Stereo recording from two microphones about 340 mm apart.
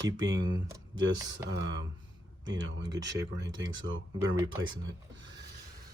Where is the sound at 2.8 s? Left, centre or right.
Centre.